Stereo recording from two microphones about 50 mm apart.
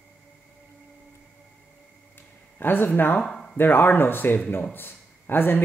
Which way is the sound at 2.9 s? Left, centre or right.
Left.